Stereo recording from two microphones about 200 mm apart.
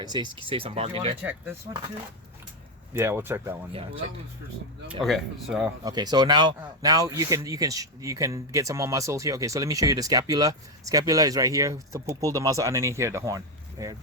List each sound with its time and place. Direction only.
0.0 s speech: 20° right (ahead or behind)
1.2 s speech: 10° right (ahead or behind)
2.9 s speech: 10° right (ahead or behind)
3.7 s speech: 30° right (ahead or behind)
5.0 s speech: centre (ahead or behind)
5.8 s speech: 20° right (ahead or behind)